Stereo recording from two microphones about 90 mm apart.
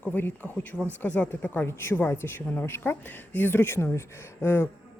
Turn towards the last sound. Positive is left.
turn(degrees=30)  # may be behind; listen again after turning